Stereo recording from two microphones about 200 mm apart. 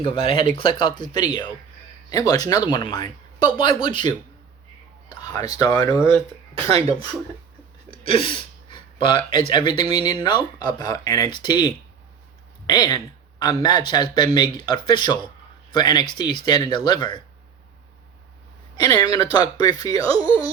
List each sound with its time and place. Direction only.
0.0 s speech: 25° left (ahead or behind)
5.1 s speech: 20° left (ahead or behind)
6.1 s speech: 25° right (ahead or behind)
7.9 s speech: 25° left (ahead or behind)
18.8 s speech: 20° left (ahead or behind)